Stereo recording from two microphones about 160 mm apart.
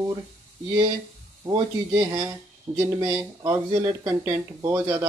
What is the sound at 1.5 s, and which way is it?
Speech, 20° right (ahead or behind).